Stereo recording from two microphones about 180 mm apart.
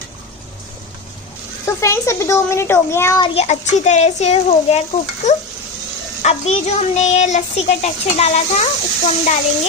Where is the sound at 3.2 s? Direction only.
35° left (ahead or behind).